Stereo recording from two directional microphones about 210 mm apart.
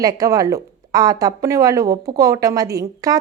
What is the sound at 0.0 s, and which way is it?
A woman's voice, 15° right (ahead or behind).